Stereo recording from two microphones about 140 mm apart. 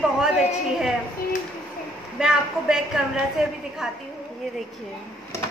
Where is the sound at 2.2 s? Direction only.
5° right (ahead or behind).